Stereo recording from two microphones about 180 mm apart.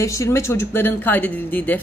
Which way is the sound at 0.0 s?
15° left (ahead or behind).